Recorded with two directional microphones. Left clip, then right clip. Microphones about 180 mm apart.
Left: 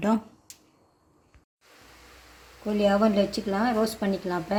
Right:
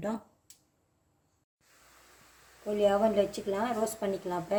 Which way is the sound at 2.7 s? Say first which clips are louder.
Left 3 dB; 35° left (ahead or behind).